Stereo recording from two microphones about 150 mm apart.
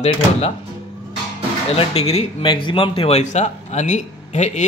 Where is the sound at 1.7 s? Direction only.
40° left (ahead or behind).